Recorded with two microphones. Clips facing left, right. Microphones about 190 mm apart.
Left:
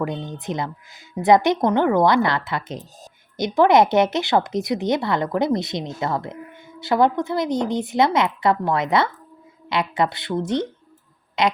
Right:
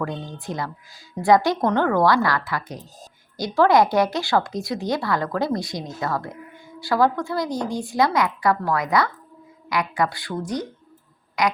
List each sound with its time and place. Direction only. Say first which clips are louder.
0.0 s speech: left 3 dB; 20° left (ahead or behind)